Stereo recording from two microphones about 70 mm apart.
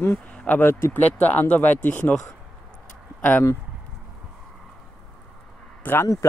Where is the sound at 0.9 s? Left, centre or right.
Left.